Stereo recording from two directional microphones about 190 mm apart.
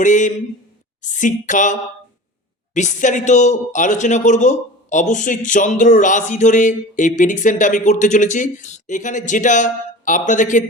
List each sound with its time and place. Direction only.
0.0 s speech: 40° left (ahead or behind)